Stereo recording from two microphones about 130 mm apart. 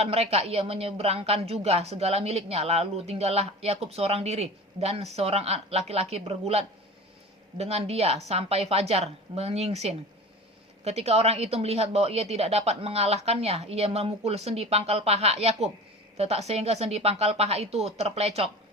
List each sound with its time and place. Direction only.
0.0 s speech: 50° right (ahead or behind)